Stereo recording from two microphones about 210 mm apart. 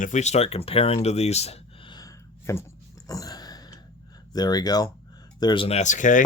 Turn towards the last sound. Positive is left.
turn(degrees=35)  # may be behind; listen again after turning